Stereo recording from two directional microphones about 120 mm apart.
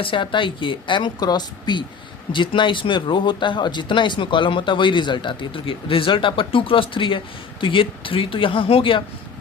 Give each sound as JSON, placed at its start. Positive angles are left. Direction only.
{"t": 0.0, "sound": "speech", "side_deg": 45}